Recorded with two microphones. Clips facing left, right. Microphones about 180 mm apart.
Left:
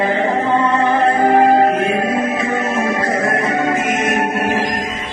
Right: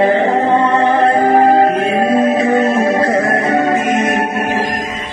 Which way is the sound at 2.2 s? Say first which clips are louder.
Right 7 dB; 30° right (ahead or behind).